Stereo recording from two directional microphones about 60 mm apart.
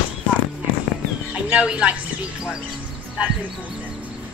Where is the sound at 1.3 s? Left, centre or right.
Centre.